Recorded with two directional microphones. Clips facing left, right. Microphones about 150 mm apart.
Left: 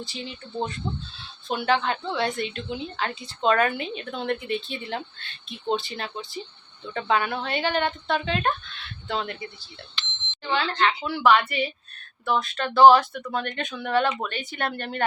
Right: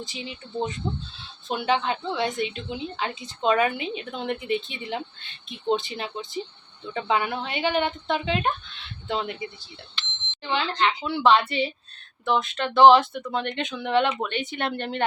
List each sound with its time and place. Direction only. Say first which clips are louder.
0.0 s a woman's voice: even; 15° right (ahead or behind)